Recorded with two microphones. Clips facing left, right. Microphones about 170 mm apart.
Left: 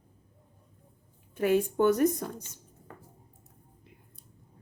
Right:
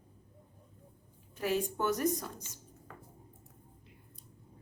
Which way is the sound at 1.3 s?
55° left (ahead or behind).